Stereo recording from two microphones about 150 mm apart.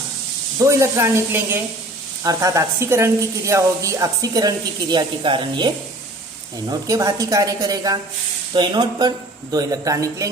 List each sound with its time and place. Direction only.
0.6 s a woman's voice: 20° right (ahead or behind)